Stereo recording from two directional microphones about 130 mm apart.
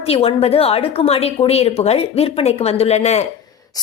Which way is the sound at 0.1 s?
50° left (ahead or behind).